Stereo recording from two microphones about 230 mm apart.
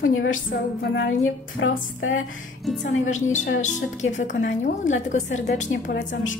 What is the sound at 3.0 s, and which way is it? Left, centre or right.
A woman's voice, left.